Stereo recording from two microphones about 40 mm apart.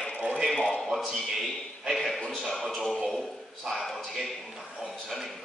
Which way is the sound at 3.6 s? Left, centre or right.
Centre.